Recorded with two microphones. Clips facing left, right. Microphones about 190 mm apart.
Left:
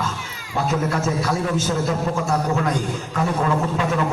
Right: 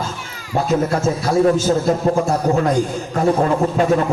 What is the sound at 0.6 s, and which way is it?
A man's voice, 35° right (ahead or behind).